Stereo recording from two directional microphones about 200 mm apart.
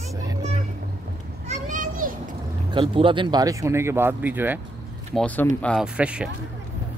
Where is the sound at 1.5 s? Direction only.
40° right (ahead or behind).